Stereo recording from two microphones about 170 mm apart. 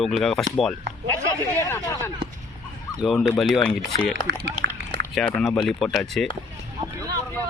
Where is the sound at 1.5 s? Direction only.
15° left (ahead or behind).